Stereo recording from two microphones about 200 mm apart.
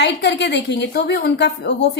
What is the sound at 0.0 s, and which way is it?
A woman's voice, 60° left (ahead or behind).